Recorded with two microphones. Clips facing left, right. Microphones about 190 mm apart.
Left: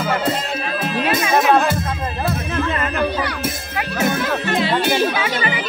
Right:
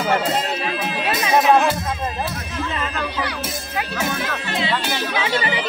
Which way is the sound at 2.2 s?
60° left (ahead or behind).